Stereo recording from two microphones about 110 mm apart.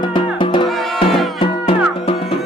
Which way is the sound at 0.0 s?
45° left (ahead or behind).